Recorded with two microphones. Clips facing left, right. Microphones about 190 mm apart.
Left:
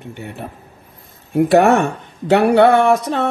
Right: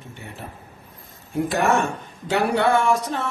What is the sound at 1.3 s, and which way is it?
Speech, 65° left (ahead or behind).